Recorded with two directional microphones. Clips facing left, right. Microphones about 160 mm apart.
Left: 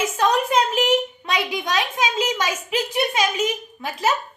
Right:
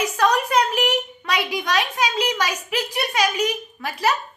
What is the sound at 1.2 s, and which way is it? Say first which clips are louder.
A child's voice: even; 20° left (ahead or behind).